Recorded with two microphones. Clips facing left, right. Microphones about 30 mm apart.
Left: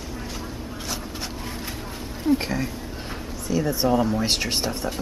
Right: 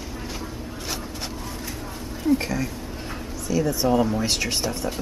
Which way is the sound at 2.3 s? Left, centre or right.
Left.